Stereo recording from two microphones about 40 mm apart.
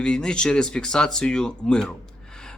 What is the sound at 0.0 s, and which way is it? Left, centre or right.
Speech, left.